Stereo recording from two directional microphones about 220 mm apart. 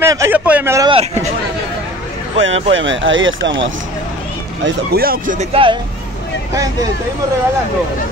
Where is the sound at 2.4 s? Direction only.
60° right (ahead or behind).